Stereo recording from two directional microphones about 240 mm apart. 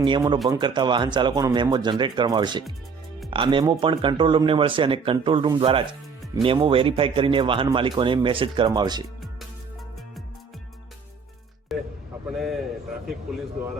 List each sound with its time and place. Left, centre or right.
0.0 s speech: centre
11.7 s vehicle: centre
12.3 s a man's voice: centre